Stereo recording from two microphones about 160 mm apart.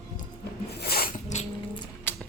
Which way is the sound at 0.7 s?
85° left.